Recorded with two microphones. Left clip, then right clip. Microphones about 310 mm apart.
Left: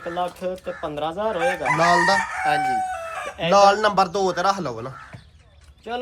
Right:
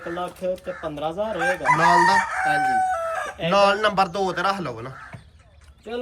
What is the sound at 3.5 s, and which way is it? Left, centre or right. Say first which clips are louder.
Speech: left 3 dB; centre.